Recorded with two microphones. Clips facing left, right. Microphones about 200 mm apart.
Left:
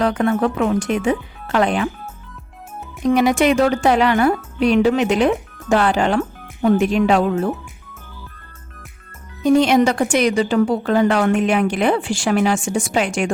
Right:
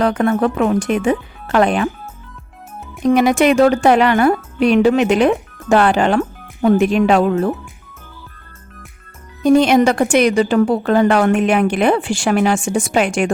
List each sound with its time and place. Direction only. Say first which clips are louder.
0.0 s a woman's voice: right 2 dB; 50° right (ahead or behind)
3.1 s a woman's voice: right 2 dB; 50° right (ahead or behind)
9.4 s a woman's voice: right 2 dB; 60° right (ahead or behind)